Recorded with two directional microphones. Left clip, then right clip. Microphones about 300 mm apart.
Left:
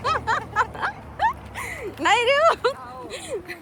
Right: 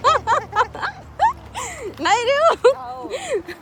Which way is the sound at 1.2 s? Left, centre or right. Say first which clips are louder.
Right 5 dB; centre.